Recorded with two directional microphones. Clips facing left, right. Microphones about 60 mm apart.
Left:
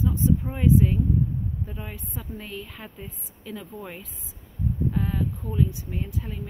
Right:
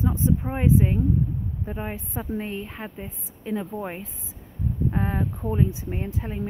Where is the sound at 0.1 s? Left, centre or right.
Right.